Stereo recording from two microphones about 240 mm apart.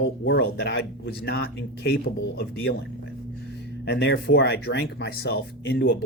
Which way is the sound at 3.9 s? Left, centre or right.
Left.